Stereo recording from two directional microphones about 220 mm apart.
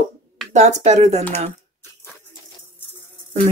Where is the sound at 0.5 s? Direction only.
30° right (ahead or behind).